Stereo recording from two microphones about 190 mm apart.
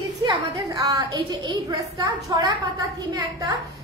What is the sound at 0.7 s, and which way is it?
A woman's voice, 20° right (ahead or behind).